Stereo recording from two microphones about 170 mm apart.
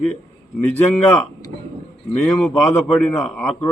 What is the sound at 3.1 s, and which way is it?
Speech, 15° left (ahead or behind).